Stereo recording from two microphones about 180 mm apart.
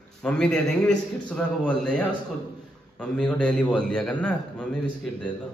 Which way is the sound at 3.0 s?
5° left (ahead or behind).